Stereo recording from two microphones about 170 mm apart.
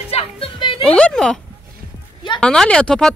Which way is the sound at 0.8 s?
5° left (ahead or behind).